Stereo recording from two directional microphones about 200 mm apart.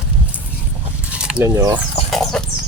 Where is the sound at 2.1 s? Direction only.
5° left (ahead or behind).